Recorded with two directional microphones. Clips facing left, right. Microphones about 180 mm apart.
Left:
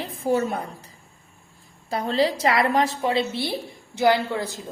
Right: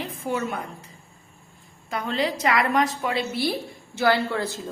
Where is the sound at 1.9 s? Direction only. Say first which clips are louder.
Left 4 dB; 35° left (ahead or behind).